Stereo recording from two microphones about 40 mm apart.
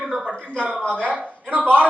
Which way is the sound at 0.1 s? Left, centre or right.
Centre.